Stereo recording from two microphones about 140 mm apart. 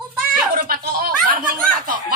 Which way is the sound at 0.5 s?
90° right.